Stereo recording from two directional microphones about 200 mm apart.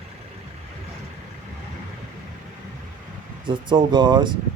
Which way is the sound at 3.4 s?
25° right (ahead or behind).